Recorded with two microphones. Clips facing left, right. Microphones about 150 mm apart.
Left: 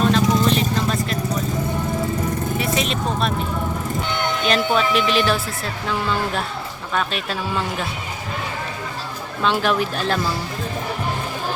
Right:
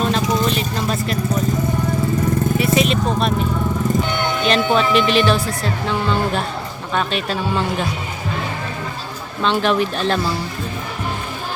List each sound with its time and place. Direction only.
0.0 s vehicle: 5° right (ahead or behind)
2.6 s vehicle: 5° right (ahead or behind)
4.4 s speech: 5° left (ahead or behind)
6.9 s speech: centre (ahead or behind)
9.4 s speech: 5° left (ahead or behind)